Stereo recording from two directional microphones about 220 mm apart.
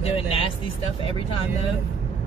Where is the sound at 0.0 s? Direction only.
25° left (ahead or behind).